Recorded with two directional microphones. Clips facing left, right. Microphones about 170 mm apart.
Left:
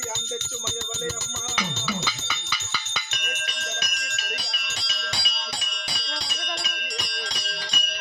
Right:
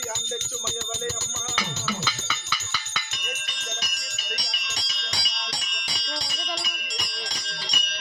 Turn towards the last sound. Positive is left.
turn(degrees=65)  # may be behind; listen again after turning